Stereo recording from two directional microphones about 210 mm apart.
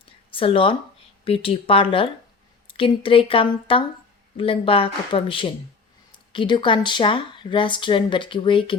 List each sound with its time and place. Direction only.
0.3 s speech: 25° left (ahead or behind)